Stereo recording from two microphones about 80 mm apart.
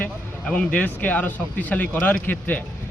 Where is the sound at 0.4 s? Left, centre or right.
Centre.